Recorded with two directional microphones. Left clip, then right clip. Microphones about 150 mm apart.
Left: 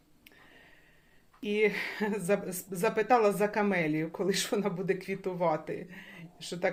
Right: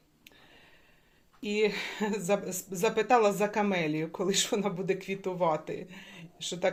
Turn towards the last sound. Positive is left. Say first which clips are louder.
# right 2 dB
turn(degrees=-5)  # may be behind; listen again after turning